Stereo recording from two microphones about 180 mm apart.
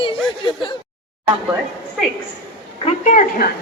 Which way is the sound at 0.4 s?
25° left (ahead or behind).